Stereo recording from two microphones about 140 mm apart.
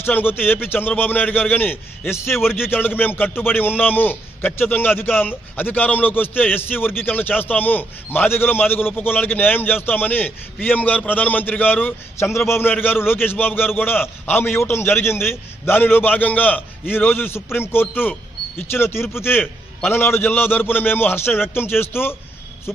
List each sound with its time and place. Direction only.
0.0 s a man's voice: 15° left (ahead or behind)